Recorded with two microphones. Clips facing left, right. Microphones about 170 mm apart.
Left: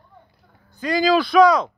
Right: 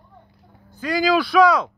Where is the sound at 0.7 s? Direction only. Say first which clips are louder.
Left 1 dB; 10° right (ahead or behind).